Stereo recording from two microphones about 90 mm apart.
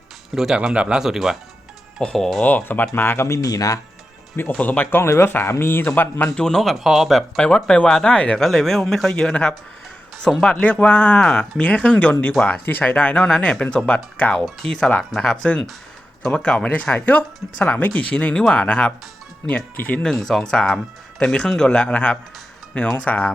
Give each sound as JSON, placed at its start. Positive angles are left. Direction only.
{"t": 0.3, "sound": "speech", "side_deg": -5}
{"t": 2.4, "sound": "speech", "side_deg": 20}
{"t": 4.5, "sound": "speech", "side_deg": 15}
{"t": 6.2, "sound": "speech", "side_deg": 10}
{"t": 12.6, "sound": "speech", "side_deg": 20}
{"t": 20.0, "sound": "speech", "side_deg": 5}